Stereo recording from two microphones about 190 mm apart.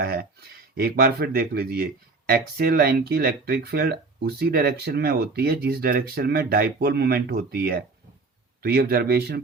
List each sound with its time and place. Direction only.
0.0 s speech: 55° right (ahead or behind)